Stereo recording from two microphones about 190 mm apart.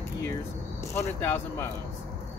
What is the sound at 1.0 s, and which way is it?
Speech, 10° left (ahead or behind).